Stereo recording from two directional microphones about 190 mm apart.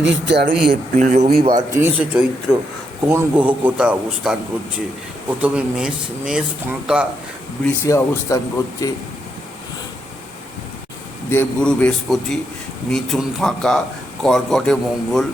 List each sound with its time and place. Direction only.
0.0 s speech: 65° right (ahead or behind)
0.9 s speech: 40° right (ahead or behind)
1.5 s speech: 15° right (ahead or behind)
2.0 s a man's voice: 5° right (ahead or behind)
5.4 s a man's voice: 5° right (ahead or behind)
7.6 s a man's voice: 15° left (ahead or behind)
11.3 s a man's voice: 10° left (ahead or behind)